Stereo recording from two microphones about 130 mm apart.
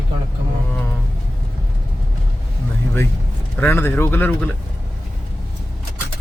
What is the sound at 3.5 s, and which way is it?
Speech, 15° left (ahead or behind).